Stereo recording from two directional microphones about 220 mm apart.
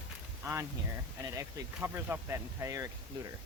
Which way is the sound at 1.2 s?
15° right (ahead or behind).